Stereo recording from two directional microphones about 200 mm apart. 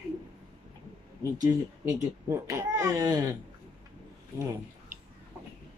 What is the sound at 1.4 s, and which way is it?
A man's voice, 15° right (ahead or behind).